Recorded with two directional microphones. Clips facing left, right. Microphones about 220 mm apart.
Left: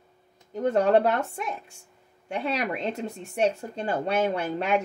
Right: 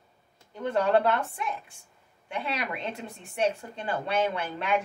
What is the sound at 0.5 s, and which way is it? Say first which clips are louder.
Speech: left 4 dB; 45° left (ahead or behind).